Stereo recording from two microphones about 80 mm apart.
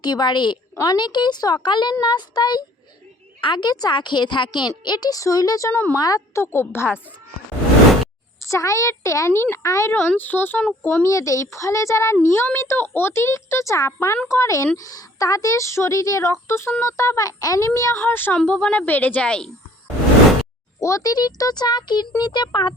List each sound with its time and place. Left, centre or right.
0.0 s speech: left
3.4 s speech: left
4.8 s a child's voice: left
5.7 s speech: left
6.0 s a woman's voice: left
6.4 s speech: left
8.4 s speech: left
9.9 s speech: left
11.0 s a child's voice: left
17.7 s a woman's voice: left; by 19.5 s centre
20.7 s a child's voice: left